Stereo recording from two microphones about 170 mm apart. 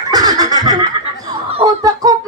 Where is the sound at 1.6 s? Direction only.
20° right (ahead or behind).